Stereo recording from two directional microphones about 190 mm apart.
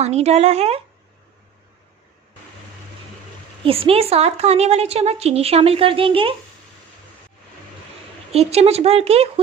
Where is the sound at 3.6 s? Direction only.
30° right (ahead or behind).